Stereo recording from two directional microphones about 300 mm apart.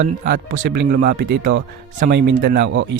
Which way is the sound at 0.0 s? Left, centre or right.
Right.